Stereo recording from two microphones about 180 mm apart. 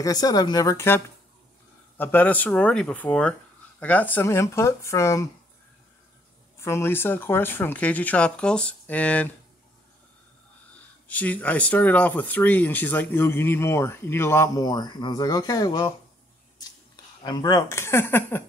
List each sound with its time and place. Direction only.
0.0 s speech: 20° left (ahead or behind)
6.6 s speech: 15° left (ahead or behind)
11.1 s speech: 10° left (ahead or behind)
17.2 s speech: 20° left (ahead or behind)